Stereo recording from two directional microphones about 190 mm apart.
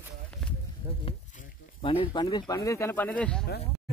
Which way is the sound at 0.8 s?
10° right (ahead or behind).